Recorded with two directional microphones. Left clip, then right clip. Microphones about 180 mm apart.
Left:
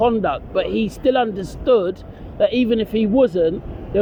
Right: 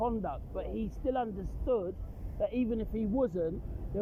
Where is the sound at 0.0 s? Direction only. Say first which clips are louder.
Left 16 dB; 60° left (ahead or behind).